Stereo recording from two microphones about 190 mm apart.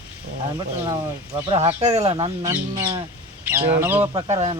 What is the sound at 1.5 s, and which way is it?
Speech, 30° right (ahead or behind).